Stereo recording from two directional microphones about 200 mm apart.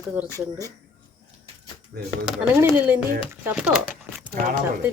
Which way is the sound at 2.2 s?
5° right (ahead or behind).